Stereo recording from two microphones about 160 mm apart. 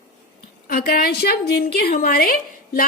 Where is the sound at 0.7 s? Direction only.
65° left (ahead or behind).